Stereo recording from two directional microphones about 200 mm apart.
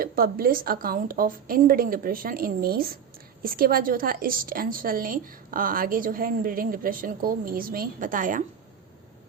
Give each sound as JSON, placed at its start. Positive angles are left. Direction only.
{"t": 0.0, "sound": "a woman's voice", "side_deg": -45}